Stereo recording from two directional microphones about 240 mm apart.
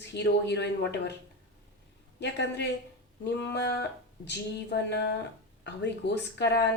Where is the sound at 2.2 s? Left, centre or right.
Left.